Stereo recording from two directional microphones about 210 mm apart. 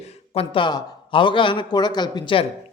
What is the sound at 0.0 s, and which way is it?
Speech, 30° left (ahead or behind).